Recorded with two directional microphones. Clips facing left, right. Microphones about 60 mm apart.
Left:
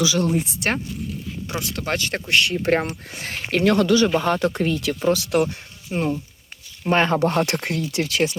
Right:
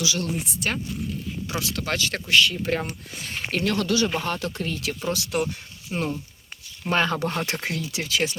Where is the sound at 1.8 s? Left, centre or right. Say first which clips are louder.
Left 4 dB; left.